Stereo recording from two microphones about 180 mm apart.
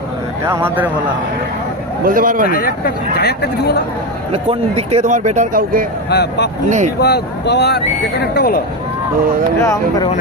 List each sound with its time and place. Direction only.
0.4 s speech: 10° right (ahead or behind)
2.0 s speech: 50° right (ahead or behind)
2.5 s speech: 55° left (ahead or behind)
4.3 s speech: 35° right (ahead or behind)
6.1 s speech: 70° left (ahead or behind)
6.7 s speech: 40° right (ahead or behind)
7.0 s speech: 65° left (ahead or behind)
9.6 s speech: 15° left (ahead or behind)